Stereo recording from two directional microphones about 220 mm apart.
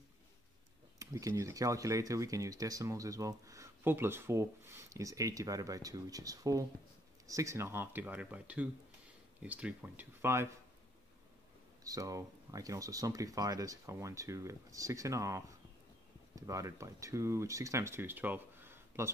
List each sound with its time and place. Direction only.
0.9 s speech: 15° right (ahead or behind)
11.8 s speech: 15° right (ahead or behind)